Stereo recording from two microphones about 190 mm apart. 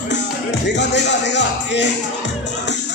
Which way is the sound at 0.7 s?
65° left (ahead or behind).